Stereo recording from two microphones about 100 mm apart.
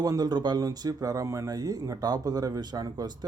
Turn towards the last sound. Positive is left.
turn(degrees=-45)  # may be behind; listen again after turning